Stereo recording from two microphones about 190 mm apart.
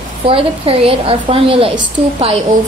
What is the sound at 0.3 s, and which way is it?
A woman's voice, 30° right (ahead or behind).